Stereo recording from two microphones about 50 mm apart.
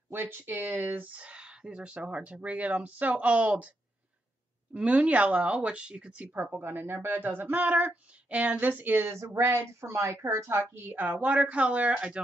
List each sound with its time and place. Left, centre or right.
0.1 s speech: right
0.7 s a sound: right
1.2 s speech: right
4.7 s speech: right
6.2 s speech: right
6.6 s a sound: right
9.0 s a woman's voice: right
11.0 s speech: right